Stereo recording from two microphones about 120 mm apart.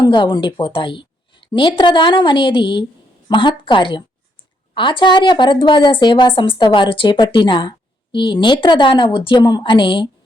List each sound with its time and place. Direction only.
0.0 s a woman's voice: 40° left (ahead or behind)